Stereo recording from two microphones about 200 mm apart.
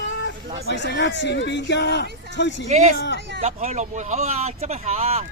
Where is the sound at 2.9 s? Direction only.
60° left (ahead or behind).